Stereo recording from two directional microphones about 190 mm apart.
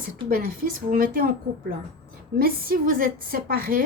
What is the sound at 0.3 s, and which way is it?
Speech, 50° right (ahead or behind).